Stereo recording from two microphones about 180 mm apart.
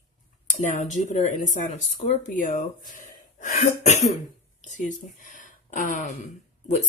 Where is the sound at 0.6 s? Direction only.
40° left (ahead or behind).